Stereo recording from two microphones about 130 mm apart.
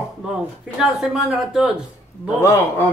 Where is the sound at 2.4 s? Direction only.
20° left (ahead or behind).